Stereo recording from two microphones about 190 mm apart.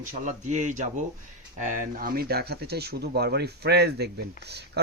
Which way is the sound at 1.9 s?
50° right (ahead or behind).